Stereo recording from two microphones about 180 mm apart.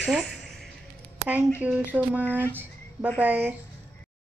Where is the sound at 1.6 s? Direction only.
10° right (ahead or behind).